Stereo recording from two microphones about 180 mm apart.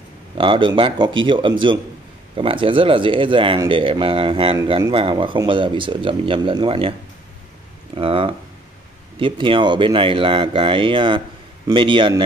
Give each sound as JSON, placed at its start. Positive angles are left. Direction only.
{"t": 0.4, "sound": "speech", "side_deg": -25}